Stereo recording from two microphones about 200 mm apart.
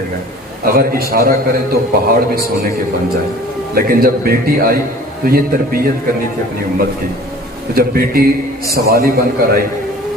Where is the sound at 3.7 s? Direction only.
45° right (ahead or behind).